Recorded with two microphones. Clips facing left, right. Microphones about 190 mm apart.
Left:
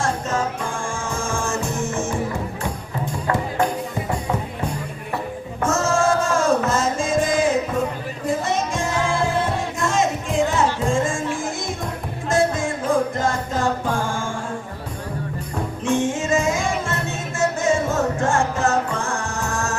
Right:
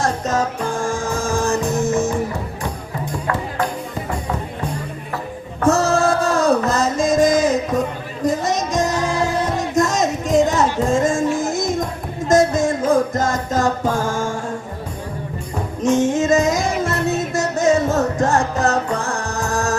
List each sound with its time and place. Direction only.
0.0 s music: 40° right (ahead or behind)
5.6 s music: 35° right (ahead or behind)
15.8 s music: 40° right (ahead or behind)